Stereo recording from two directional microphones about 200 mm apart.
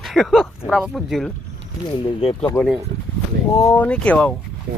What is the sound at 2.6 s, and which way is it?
Speech, 10° left (ahead or behind).